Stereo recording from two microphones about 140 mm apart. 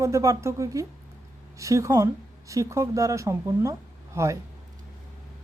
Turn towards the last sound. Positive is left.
turn(degrees=-20)  # may be behind; listen again after turning